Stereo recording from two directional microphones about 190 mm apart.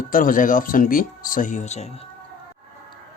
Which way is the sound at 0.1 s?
45° left (ahead or behind).